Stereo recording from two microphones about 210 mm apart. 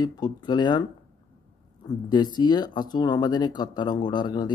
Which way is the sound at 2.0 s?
20° left (ahead or behind).